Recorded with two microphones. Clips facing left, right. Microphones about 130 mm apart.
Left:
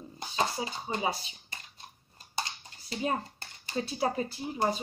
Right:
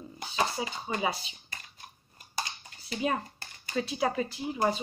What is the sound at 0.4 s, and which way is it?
Speech, 30° left (ahead or behind).